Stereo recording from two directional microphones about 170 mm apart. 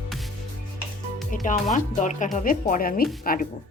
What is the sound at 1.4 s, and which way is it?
Speech, 50° left (ahead or behind).